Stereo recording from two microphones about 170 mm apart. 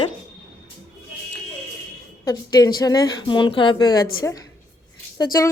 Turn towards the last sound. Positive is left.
turn(degrees=20)  # may be behind; listen again after turning